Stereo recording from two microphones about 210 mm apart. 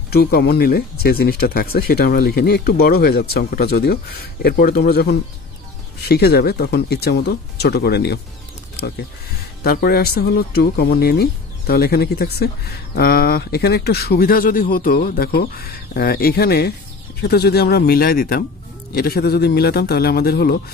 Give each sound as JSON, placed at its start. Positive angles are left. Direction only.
{"t": 0.1, "sound": "speech", "side_deg": 50}
{"t": 8.7, "sound": "pulleys", "side_deg": 50}
{"t": 9.6, "sound": "speech", "side_deg": 45}